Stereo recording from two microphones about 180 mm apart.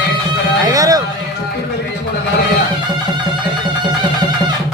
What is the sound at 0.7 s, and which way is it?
Run, 20° right (ahead or behind).